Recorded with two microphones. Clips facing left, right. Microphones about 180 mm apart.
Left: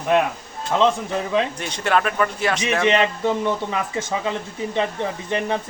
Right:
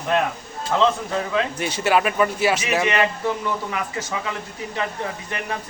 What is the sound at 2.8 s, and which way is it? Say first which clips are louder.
A man's voice: left 3 dB; 25° left (ahead or behind).